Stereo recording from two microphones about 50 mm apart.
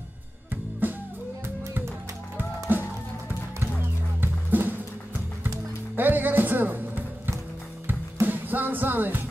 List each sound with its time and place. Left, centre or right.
0.5 s music: right
2.7 s music: right
4.2 s music: right
5.9 s music: right